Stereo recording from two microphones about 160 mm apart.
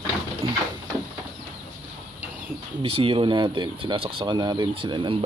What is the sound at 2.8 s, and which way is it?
Speech, 35° right (ahead or behind).